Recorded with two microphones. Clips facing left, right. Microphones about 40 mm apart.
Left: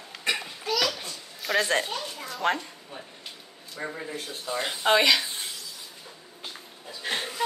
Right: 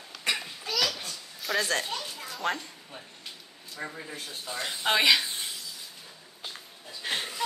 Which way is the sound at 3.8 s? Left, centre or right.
Centre.